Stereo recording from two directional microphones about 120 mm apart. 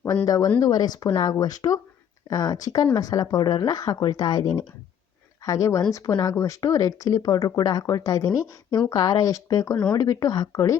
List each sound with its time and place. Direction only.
0.3 s speech: 30° left (ahead or behind)